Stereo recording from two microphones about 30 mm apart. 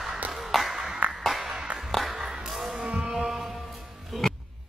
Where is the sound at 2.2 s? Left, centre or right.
Right.